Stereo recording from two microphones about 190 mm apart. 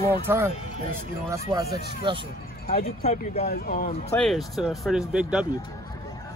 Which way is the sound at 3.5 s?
45° left (ahead or behind).